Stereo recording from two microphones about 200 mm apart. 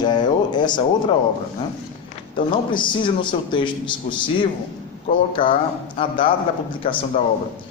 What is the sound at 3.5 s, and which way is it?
A man's voice, 25° left (ahead or behind).